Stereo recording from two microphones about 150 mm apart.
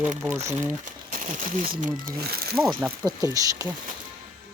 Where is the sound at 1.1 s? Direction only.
65° right (ahead or behind); by 2.6 s 90° right.